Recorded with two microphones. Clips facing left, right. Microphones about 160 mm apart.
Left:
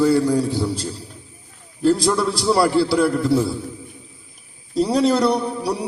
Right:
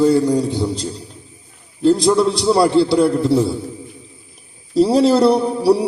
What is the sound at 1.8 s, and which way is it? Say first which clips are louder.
A man's voice: right 4 dB; 20° right (ahead or behind).